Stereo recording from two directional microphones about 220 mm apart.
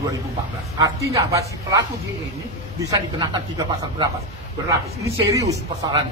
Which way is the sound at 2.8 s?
15° right (ahead or behind).